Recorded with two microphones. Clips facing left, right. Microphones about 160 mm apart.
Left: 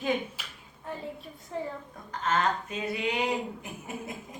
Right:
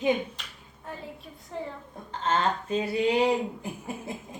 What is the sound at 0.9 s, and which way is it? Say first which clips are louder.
Speech: left 2 dB; centre (ahead or behind).